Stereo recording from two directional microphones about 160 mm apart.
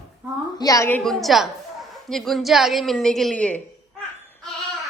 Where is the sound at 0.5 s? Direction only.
20° left (ahead or behind).